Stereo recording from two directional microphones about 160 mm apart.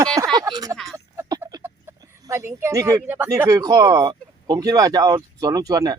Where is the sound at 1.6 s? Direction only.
20° right (ahead or behind).